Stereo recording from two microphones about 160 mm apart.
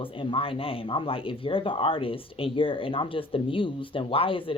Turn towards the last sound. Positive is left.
turn(degrees=35)  # may be behind; listen again after turning